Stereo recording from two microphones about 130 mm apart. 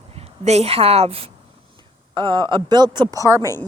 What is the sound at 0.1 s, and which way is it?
A woman's voice, 50° right (ahead or behind).